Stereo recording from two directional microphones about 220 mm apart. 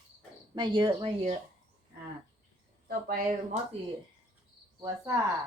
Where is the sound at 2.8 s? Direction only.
40° right (ahead or behind).